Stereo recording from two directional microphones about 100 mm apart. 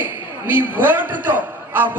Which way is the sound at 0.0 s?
20° right (ahead or behind).